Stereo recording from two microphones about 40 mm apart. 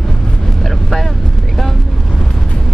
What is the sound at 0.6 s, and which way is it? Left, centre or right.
Vehicle, centre.